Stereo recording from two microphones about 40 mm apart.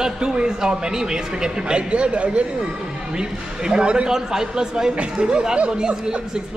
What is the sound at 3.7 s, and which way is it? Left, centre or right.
Speech, right.